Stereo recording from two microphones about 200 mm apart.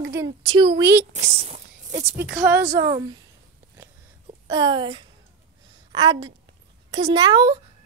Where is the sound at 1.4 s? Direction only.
40° right (ahead or behind).